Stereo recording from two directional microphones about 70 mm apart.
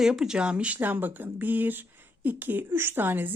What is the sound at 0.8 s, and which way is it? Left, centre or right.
Speech, right.